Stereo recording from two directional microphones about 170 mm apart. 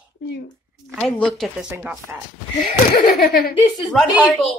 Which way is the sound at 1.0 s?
5° left (ahead or behind).